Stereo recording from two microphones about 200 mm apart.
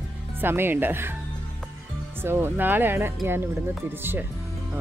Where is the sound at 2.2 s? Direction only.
10° right (ahead or behind).